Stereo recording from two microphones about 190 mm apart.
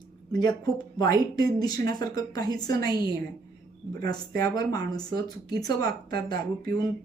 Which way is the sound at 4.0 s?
20° left (ahead or behind).